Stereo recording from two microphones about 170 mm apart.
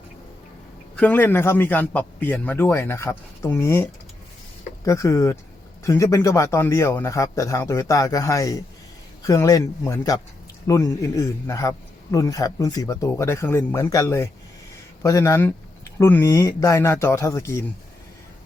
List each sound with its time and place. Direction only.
0.9 s a man's voice: 10° left (ahead or behind)
4.9 s a man's voice: 20° left (ahead or behind)